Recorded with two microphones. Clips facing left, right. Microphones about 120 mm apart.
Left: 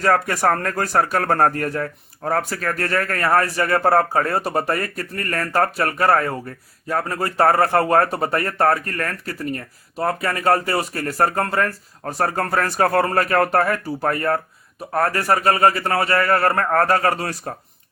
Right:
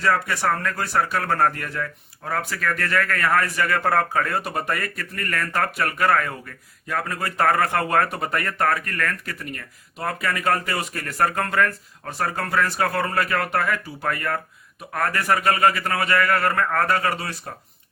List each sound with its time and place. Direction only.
0.0 s speech: 45° left (ahead or behind)